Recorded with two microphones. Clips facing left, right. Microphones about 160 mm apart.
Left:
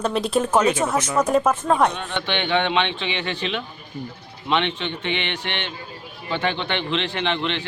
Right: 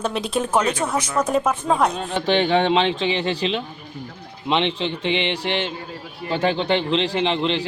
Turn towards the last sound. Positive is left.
turn(degrees=-30)  # may be behind; listen again after turning